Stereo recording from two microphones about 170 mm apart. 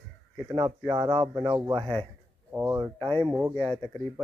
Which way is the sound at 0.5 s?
25° right (ahead or behind).